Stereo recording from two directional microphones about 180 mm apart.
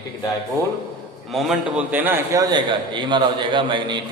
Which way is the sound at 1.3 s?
Centre (ahead or behind).